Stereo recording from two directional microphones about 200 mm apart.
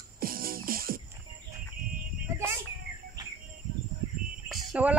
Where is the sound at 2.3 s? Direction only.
15° right (ahead or behind).